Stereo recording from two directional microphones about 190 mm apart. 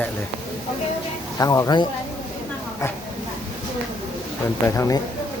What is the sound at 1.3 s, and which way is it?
Speech, 20° left (ahead or behind).